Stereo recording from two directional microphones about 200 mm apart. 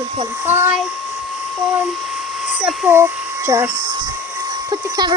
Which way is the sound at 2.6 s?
5° right (ahead or behind).